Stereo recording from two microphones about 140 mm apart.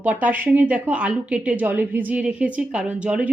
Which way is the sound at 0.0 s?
10° right (ahead or behind).